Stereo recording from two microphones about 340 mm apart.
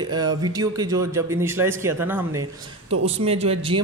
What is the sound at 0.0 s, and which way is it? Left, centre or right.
Speech, centre.